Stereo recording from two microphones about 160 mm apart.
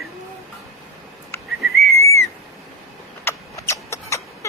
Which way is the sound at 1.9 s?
15° left (ahead or behind).